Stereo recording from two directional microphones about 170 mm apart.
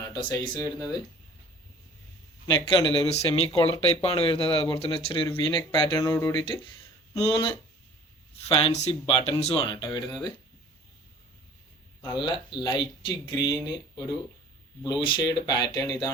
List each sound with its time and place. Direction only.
0.0 s speech: 25° left (ahead or behind)
2.5 s speech: 25° left (ahead or behind)
6.4 s speech: 30° left (ahead or behind)
12.0 s speech: 25° left (ahead or behind)